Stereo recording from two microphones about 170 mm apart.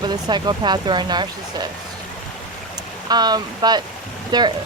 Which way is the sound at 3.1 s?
25° right (ahead or behind).